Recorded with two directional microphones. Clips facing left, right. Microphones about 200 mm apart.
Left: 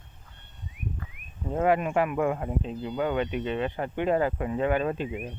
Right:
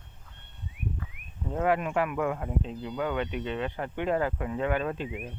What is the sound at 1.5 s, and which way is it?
Speech, 20° left (ahead or behind).